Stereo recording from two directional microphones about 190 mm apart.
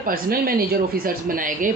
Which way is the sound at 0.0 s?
50° right (ahead or behind).